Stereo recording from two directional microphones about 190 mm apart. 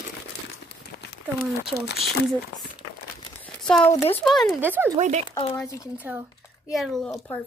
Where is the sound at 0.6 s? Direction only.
60° left (ahead or behind).